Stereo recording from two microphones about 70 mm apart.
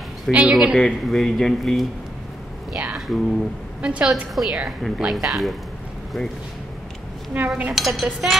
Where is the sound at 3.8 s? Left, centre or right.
Centre.